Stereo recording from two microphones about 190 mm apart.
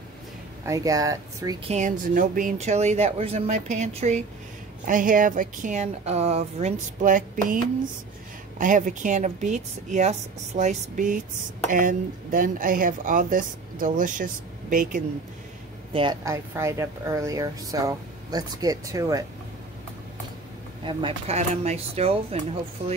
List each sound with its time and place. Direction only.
0.7 s speech: 15° right (ahead or behind)
1.7 s speech: 40° right (ahead or behind)
8.5 s speech: 45° right (ahead or behind)
15.9 s a woman's voice: 25° right (ahead or behind)
20.8 s speech: 25° right (ahead or behind)